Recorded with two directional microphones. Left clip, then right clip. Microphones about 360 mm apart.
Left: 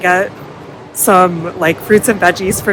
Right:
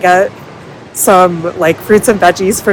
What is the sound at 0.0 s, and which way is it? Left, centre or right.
Speech, centre.